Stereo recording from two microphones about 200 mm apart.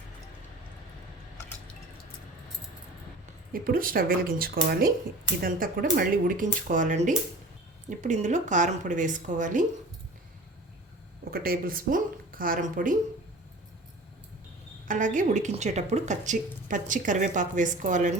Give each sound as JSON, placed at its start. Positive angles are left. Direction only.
{"t": 3.5, "sound": "a woman's voice", "side_deg": -45}
{"t": 11.3, "sound": "speech", "side_deg": -45}
{"t": 14.8, "sound": "a woman's voice", "side_deg": -40}